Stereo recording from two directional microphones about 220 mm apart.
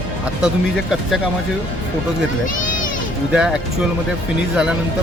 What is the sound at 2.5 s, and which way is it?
Children playing, 35° left (ahead or behind).